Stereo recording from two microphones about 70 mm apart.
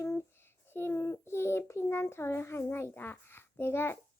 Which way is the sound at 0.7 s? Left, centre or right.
Left.